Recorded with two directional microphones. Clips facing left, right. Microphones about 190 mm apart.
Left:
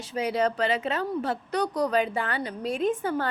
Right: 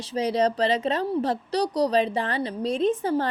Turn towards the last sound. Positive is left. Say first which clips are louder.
# right 3 dB
turn(degrees=-35)  # may be behind; listen again after turning